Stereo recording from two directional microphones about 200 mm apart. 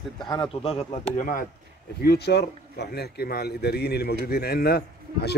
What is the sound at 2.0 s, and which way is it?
A man's voice, 55° left (ahead or behind).